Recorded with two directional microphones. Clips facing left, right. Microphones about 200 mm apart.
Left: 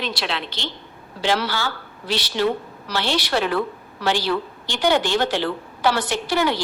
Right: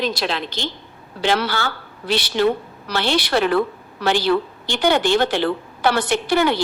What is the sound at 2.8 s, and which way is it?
A woman's voice, 60° right (ahead or behind).